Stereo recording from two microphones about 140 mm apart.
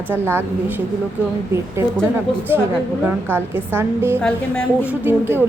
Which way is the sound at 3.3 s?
15° right (ahead or behind).